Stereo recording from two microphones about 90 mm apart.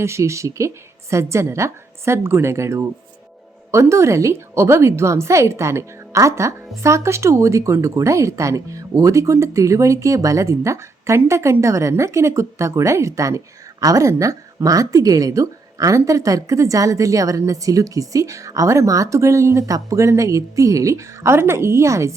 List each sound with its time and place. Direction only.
0.0 s a woman's voice: 30° right (ahead or behind)